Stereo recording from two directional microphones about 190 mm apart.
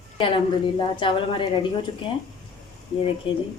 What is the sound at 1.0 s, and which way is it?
Speech, 25° left (ahead or behind).